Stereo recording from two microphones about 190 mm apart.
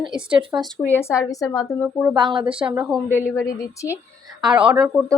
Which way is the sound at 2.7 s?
5° right (ahead or behind).